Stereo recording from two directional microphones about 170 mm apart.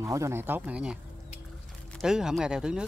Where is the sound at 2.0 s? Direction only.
5° right (ahead or behind).